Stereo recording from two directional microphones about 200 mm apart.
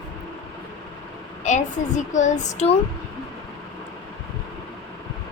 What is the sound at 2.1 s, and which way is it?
Speech, 40° left (ahead or behind).